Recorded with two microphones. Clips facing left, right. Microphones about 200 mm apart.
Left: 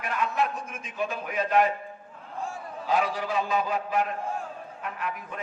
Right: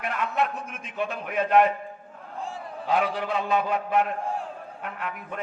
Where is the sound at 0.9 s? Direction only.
60° right (ahead or behind).